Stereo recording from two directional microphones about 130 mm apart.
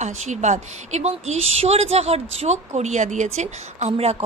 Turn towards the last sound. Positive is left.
turn(degrees=-55)  # may be behind; listen again after turning